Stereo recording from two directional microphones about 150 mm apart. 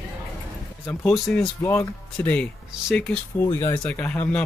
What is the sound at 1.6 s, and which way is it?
Speech, 20° left (ahead or behind).